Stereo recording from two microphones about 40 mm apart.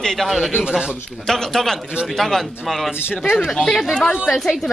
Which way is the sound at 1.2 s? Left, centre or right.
Centre.